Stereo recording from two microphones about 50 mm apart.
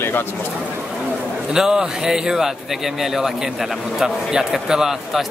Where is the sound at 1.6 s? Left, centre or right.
Centre.